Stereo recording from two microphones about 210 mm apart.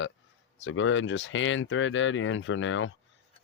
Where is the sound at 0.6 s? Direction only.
65° left (ahead or behind).